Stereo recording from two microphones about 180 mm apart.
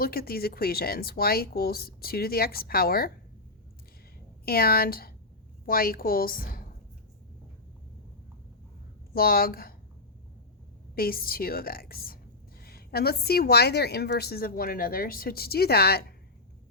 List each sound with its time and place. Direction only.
0.0 s a woman's voice: 55° left (ahead or behind)
4.4 s a woman's voice: 55° left (ahead or behind)
9.1 s a woman's voice: 55° left (ahead or behind)
10.9 s a woman's voice: 55° left (ahead or behind)